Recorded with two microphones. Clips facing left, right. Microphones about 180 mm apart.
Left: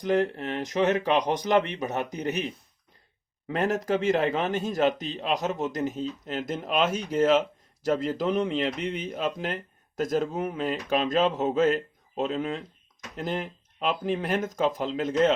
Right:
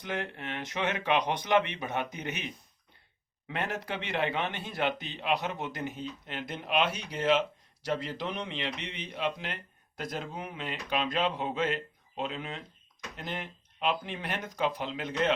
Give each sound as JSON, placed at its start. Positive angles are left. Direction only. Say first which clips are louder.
{"t": 0.0, "sound": "speech", "louder": "left 11 dB", "side_deg": 40}